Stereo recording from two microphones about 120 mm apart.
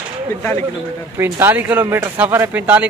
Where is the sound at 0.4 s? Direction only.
20° left (ahead or behind).